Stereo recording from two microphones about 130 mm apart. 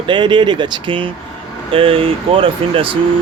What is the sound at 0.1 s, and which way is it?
Speech, 35° right (ahead or behind).